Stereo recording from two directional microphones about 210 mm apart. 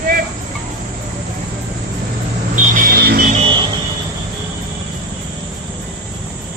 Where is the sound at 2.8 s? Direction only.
45° right (ahead or behind); by 3.6 s 30° right (ahead or behind).